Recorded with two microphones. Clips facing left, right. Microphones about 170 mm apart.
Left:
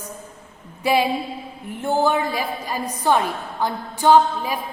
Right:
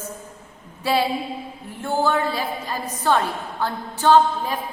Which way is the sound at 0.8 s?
15° left (ahead or behind).